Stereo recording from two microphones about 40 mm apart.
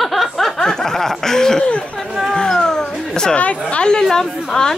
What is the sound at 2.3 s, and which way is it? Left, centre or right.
Cat, centre.